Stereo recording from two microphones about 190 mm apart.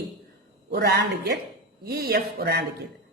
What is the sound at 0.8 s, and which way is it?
A woman's voice, 60° right (ahead or behind).